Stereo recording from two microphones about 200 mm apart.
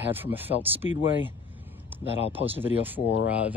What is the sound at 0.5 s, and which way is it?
Speech, 30° right (ahead or behind).